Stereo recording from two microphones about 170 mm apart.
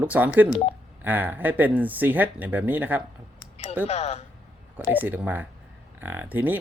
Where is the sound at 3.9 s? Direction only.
40° left (ahead or behind).